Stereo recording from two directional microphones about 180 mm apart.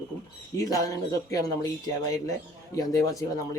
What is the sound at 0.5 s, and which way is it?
Speech, 20° left (ahead or behind).